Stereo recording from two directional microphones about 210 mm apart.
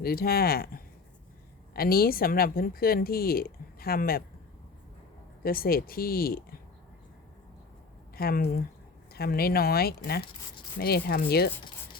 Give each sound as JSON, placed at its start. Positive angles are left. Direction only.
{"t": 0.0, "sound": "speech", "side_deg": 45}
{"t": 5.4, "sound": "speech", "side_deg": 45}
{"t": 8.1, "sound": "speech", "side_deg": 45}